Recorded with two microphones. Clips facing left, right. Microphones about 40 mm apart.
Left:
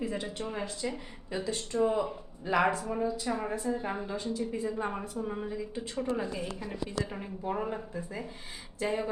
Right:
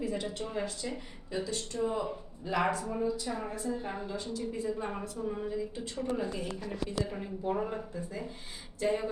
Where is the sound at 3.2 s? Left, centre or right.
Left.